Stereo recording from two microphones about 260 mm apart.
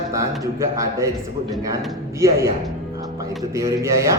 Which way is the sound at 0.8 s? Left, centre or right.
Centre.